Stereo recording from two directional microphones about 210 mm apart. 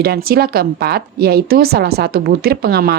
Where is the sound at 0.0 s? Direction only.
45° right (ahead or behind).